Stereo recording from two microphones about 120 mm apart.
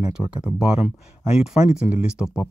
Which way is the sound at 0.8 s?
55° left (ahead or behind).